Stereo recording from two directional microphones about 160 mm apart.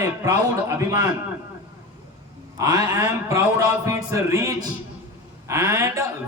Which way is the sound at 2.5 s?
20° right (ahead or behind).